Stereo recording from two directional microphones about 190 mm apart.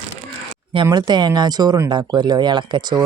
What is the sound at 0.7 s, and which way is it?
Speech, 25° right (ahead or behind).